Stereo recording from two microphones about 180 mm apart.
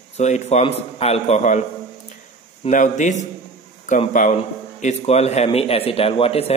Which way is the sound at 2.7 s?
45° left (ahead or behind).